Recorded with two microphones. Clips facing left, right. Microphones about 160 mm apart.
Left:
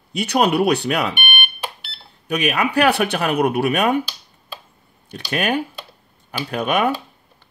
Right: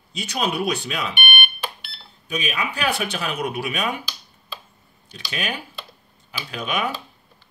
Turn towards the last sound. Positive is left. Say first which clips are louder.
# left 7 dB
turn(degrees=55)  # may be behind; listen again after turning